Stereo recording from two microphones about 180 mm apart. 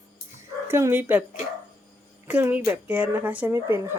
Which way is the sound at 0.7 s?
15° right (ahead or behind).